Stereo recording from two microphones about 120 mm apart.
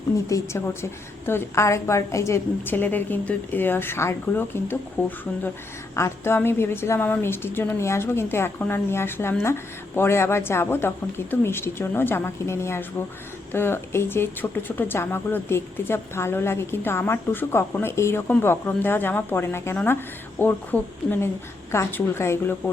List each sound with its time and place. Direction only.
0.3 s a woman's voice: 25° left (ahead or behind)